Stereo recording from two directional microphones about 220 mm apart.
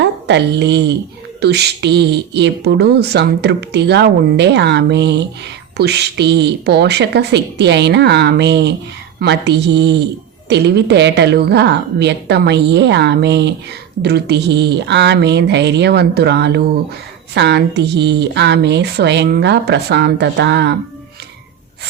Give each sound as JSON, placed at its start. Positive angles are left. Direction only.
{"t": 0.0, "sound": "a woman's voice", "side_deg": -50}